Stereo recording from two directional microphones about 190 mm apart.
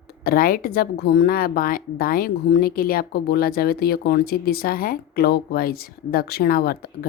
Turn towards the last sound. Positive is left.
turn(degrees=55)  # may be behind; listen again after turning